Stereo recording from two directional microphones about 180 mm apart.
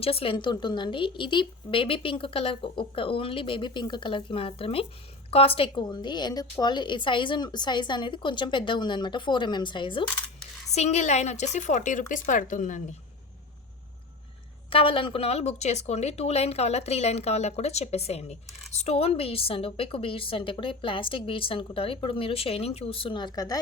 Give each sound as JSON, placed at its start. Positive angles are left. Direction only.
{"t": 0.0, "sound": "a woman's voice", "side_deg": 30}
{"t": 10.7, "sound": "speech", "side_deg": 40}
{"t": 14.7, "sound": "a woman's voice", "side_deg": 30}